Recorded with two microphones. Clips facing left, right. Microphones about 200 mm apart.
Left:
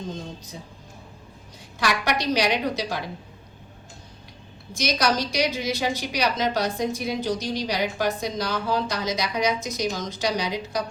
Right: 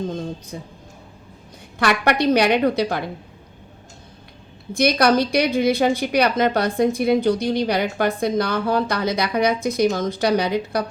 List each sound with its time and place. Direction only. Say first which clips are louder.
0.5 s a woman's voice: right 7 dB; 60° right (ahead or behind)
1.8 s a woman's voice: right 6 dB; 55° right (ahead or behind)
4.7 s a woman's voice: right 7 dB; 55° right (ahead or behind)